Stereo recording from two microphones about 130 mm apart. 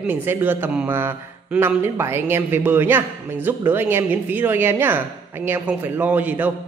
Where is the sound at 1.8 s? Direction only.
20° right (ahead or behind).